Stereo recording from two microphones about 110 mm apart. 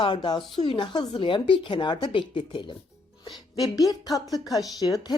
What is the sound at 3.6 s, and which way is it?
Speech, 35° left (ahead or behind).